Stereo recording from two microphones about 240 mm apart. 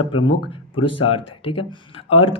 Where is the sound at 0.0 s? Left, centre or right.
Left.